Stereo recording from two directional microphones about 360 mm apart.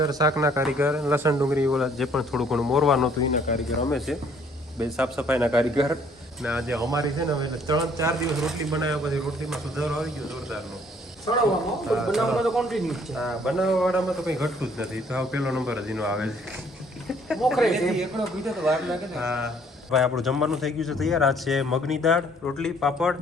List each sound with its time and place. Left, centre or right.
0.0 s speech: centre
3.5 s speech: centre
3.8 s speech: centre
11.9 s speech: centre